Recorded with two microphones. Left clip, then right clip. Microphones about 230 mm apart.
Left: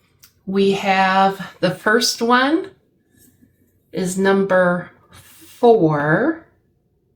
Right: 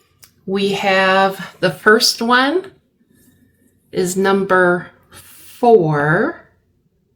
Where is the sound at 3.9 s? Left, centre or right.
Right.